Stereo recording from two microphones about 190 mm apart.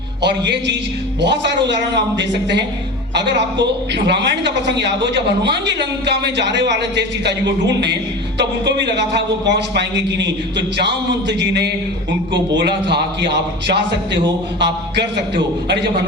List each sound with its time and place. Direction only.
0.2 s a man's voice: 65° right (ahead or behind)